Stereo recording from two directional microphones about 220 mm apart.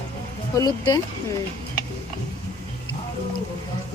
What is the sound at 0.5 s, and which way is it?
Speech, 15° left (ahead or behind).